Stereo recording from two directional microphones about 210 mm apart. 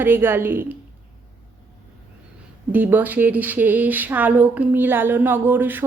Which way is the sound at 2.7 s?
10° right (ahead or behind).